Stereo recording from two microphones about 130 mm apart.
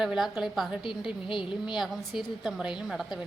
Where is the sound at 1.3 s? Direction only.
40° left (ahead or behind).